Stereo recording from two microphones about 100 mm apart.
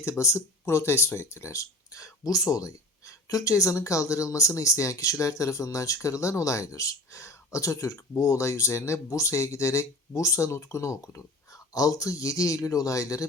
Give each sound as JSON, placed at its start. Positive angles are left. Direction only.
{"t": 0.0, "sound": "speech", "side_deg": 30}